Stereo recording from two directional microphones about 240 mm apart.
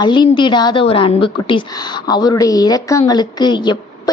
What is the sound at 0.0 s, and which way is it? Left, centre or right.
A woman's voice, centre.